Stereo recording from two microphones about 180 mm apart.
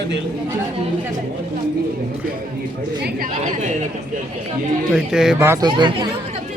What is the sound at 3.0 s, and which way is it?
Speech, 50° right (ahead or behind).